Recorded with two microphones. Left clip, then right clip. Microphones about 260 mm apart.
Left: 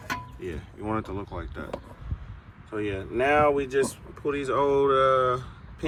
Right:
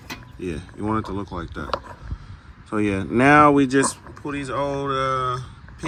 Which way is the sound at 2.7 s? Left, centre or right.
Right.